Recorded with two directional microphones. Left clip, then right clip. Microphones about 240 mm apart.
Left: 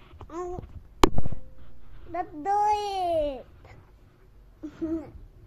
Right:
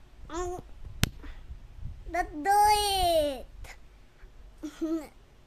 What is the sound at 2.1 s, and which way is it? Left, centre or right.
Babbling, centre.